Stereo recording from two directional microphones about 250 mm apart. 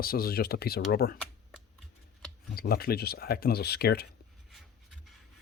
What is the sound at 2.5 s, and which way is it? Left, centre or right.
Speech, left.